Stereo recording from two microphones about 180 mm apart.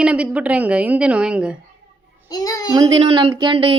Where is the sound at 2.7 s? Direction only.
20° right (ahead or behind).